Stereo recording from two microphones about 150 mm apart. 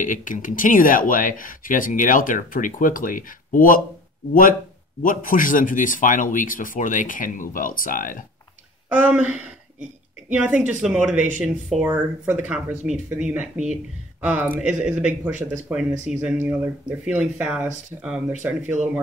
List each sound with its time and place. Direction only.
0.0 s speech: 60° left (ahead or behind)
8.8 s speech: 10° right (ahead or behind)